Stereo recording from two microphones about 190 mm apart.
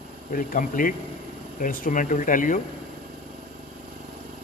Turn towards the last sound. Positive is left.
turn(degrees=45)  # may be behind; listen again after turning